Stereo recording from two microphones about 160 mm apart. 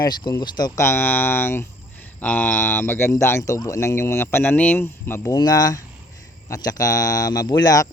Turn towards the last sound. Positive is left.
turn(degrees=20)  # may be behind; listen again after turning